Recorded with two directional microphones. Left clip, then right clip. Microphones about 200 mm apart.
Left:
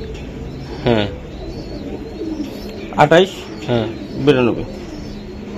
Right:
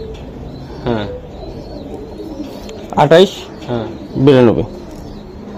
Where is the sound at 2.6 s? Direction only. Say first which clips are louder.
Right 1 dB; 45° right (ahead or behind).